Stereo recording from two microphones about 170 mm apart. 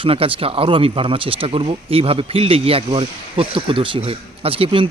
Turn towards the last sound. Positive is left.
turn(degrees=-30)  # may be behind; listen again after turning